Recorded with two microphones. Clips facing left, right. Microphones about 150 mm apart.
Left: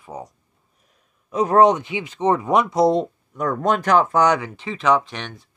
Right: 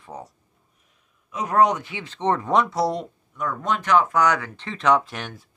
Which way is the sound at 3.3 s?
40° left (ahead or behind).